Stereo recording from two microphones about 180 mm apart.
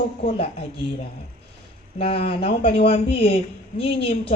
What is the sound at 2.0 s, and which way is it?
A woman's voice, 30° left (ahead or behind).